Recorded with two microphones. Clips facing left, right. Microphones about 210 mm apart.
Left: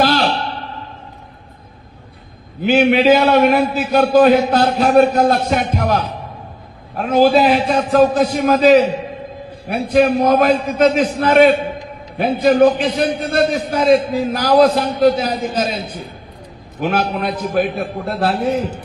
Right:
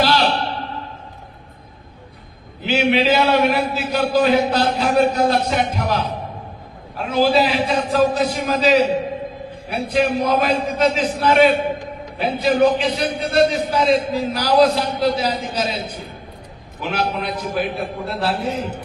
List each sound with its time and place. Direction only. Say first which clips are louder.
0.0 s a sound: left 2 dB; 50° left (ahead or behind)
2.6 s a man's voice: left 5 dB; 50° left (ahead or behind)
16.8 s a man's voice: left 4 dB; 50° left (ahead or behind)